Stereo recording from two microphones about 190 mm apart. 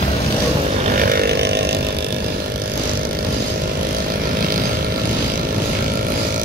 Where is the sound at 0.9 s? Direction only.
50° right (ahead or behind).